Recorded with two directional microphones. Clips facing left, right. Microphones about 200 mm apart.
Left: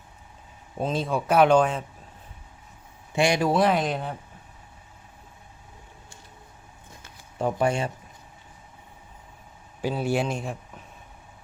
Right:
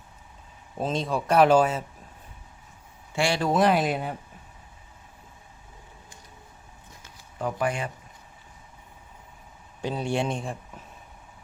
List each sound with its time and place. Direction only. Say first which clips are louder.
0.8 s speech: left 1 dB; centre (ahead or behind)
3.2 s a man's voice: left 3 dB; 15° left (ahead or behind)
3.5 s speech: even; centre (ahead or behind)
7.3 s speech: left 4 dB; 25° left (ahead or behind)
9.8 s speech: left 2 dB; 5° left (ahead or behind)